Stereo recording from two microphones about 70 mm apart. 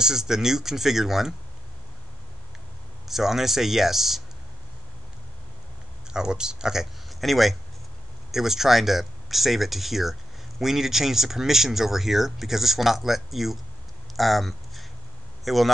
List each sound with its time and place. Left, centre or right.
0.0 s speech: centre
3.1 s speech: centre
6.1 s speech: centre
14.1 s a sound: centre
15.4 s speech: centre